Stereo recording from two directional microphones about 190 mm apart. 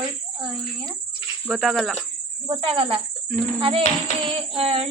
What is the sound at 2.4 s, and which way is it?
Speech, 25° right (ahead or behind).